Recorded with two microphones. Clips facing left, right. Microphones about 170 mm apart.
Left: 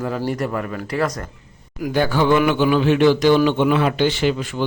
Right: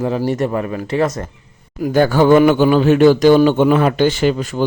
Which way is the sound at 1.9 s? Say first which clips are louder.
Right 6 dB; 45° right (ahead or behind).